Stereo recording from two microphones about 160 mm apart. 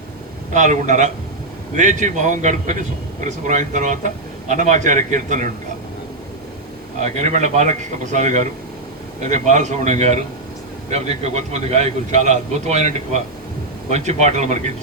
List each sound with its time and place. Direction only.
0.5 s a man's voice: 50° right (ahead or behind)
7.0 s a man's voice: 45° right (ahead or behind)